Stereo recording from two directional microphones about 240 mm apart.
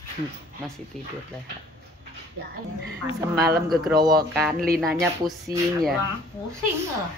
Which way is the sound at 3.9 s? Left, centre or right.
Centre.